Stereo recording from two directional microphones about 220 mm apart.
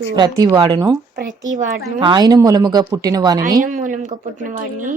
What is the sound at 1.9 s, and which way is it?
Speech, 20° right (ahead or behind).